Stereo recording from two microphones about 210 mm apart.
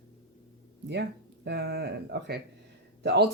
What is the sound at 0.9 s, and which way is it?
Speech, 55° right (ahead or behind).